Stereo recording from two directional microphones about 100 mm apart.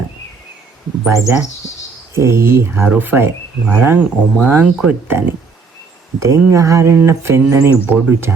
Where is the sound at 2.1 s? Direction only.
25° right (ahead or behind).